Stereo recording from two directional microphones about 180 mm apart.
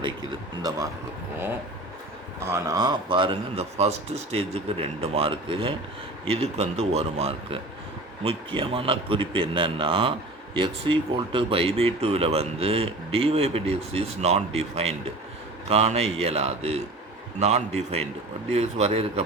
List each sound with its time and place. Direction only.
0.7 s speech: 20° right (ahead or behind)
2.4 s a man's voice: 15° right (ahead or behind); by 19.2 s 35° right (ahead or behind)